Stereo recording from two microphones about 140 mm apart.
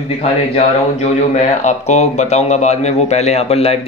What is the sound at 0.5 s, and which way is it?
Speech, 55° left (ahead or behind).